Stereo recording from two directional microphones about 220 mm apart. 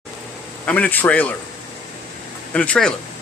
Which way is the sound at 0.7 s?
10° left (ahead or behind).